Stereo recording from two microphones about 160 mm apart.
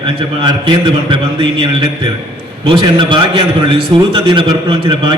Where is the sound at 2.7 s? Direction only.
30° right (ahead or behind).